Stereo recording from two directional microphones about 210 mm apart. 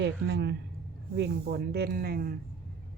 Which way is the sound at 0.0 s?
55° right (ahead or behind).